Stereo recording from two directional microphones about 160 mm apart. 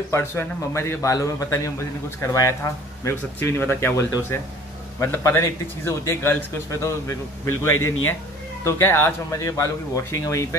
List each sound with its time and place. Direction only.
0.1 s a man's voice: 15° left (ahead or behind)